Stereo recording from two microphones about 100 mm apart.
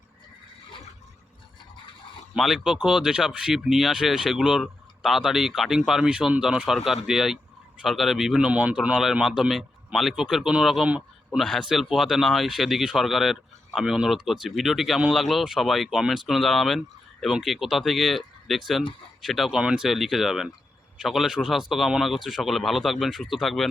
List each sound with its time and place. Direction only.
2.3 s a man's voice: centre (ahead or behind)